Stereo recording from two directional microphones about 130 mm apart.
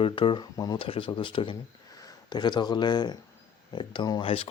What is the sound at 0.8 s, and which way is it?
Speech, 45° left (ahead or behind).